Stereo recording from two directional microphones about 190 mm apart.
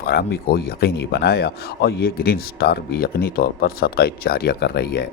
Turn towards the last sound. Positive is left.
turn(degrees=55)  # may be behind; listen again after turning